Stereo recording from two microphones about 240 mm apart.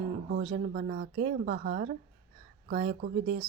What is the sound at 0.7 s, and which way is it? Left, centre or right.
Speech, right.